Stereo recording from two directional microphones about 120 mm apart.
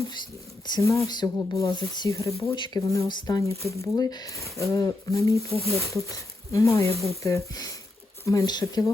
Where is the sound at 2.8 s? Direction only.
25° left (ahead or behind).